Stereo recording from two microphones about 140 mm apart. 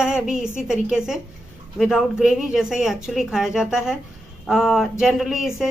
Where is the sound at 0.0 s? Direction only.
5° right (ahead or behind).